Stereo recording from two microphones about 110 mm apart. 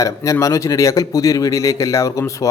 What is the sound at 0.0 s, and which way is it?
Speech, 30° left (ahead or behind).